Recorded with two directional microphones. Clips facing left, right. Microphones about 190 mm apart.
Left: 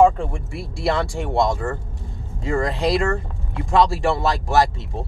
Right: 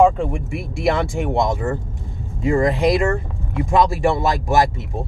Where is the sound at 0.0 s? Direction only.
15° right (ahead or behind).